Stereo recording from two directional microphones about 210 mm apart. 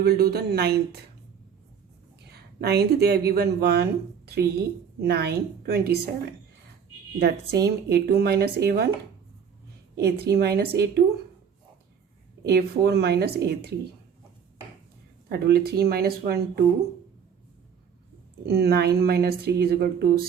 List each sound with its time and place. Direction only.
0.0 s speech: 45° right (ahead or behind)
2.3 s speech: 50° right (ahead or behind)
4.9 s speech: 50° right (ahead or behind)
7.2 s speech: 50° right (ahead or behind)
10.0 s speech: 50° right (ahead or behind)
12.4 s speech: 50° right (ahead or behind)
15.3 s speech: 50° right (ahead or behind)
18.4 s speech: 50° right (ahead or behind)